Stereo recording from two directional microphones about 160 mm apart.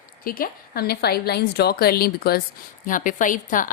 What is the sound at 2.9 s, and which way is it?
Speech, 55° left (ahead or behind).